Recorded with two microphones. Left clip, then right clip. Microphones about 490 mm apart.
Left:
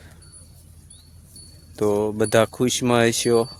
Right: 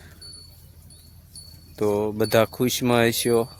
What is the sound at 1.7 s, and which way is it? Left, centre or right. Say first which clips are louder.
Speech: left 2 dB; right.